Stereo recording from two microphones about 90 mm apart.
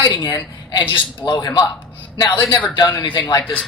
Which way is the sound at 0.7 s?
60° left (ahead or behind).